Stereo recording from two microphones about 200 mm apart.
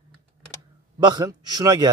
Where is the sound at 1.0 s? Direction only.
20° right (ahead or behind).